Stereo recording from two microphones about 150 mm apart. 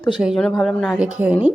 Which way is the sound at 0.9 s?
10° right (ahead or behind).